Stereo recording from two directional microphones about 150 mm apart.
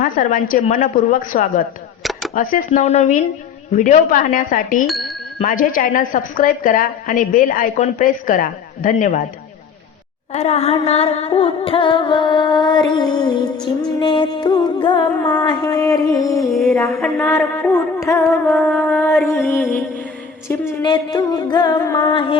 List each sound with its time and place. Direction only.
0.0 s a woman's voice: 65° left (ahead or behind)
2.8 s a woman's voice: 50° left (ahead or behind)
4.9 s a sound: centre (ahead or behind)
5.5 s a woman's voice: 65° left (ahead or behind)
10.3 s music: 45° left (ahead or behind); by 16.5 s 20° left (ahead or behind)
17.0 s a sound: 10° left (ahead or behind)
20.8 s music: 30° left (ahead or behind)